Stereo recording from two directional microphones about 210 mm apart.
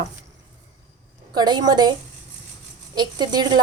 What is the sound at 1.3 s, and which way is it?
Speech, 20° right (ahead or behind).